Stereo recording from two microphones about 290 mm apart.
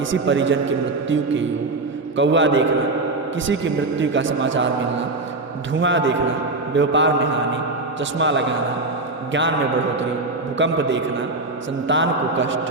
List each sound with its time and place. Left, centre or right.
0.1 s a man's voice: right
8.2 s a man's voice: right
10.6 s a man's voice: right